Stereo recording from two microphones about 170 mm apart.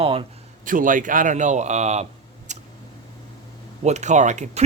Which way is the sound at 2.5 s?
45° right (ahead or behind).